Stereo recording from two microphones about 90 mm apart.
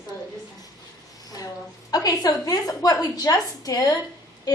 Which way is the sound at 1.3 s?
45° left (ahead or behind).